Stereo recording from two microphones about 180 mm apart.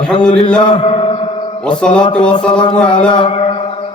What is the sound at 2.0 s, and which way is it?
Speech, 30° left (ahead or behind).